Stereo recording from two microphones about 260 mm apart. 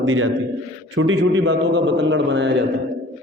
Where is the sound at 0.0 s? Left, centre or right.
Right.